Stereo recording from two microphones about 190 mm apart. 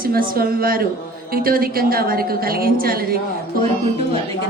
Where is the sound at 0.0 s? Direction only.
50° right (ahead or behind).